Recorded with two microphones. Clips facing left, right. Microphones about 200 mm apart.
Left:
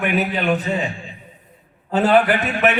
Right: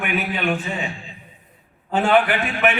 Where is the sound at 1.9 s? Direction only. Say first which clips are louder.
Left 2 dB; 40° left (ahead or behind).